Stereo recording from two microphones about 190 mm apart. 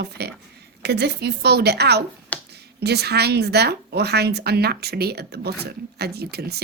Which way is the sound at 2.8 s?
60° right (ahead or behind).